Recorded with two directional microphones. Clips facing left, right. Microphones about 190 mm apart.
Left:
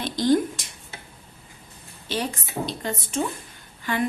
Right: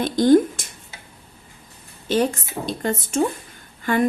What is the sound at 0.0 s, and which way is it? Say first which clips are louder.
Speech: right 6 dB; 50° right (ahead or behind).